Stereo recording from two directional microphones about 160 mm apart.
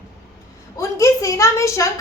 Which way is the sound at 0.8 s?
20° left (ahead or behind).